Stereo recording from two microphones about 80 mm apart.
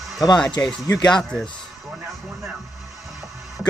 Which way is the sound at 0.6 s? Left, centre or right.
Left.